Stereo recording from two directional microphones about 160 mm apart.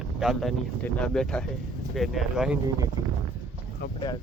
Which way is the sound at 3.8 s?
85° left.